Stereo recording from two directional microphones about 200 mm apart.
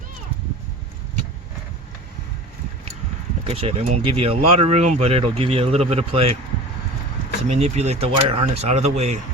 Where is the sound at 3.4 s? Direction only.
30° right (ahead or behind).